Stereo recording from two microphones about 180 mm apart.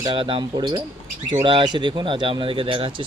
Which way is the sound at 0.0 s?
25° right (ahead or behind).